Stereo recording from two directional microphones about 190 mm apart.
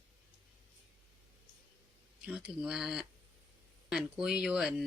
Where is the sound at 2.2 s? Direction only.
5° right (ahead or behind).